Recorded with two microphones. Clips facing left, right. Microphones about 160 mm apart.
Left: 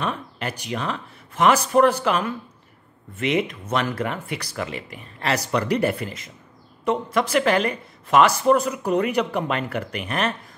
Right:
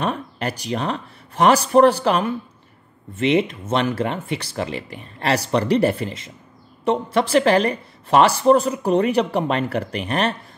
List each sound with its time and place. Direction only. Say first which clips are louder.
0.0 s a woman's voice: right 4 dB; 35° right (ahead or behind)